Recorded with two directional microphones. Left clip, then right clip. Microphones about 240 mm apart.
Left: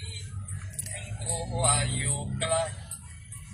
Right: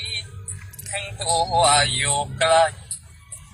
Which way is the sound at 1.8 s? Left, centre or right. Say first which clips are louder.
Right 12 dB; right.